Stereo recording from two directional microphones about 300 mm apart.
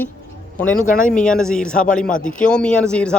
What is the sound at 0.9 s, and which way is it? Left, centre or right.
Speech, left.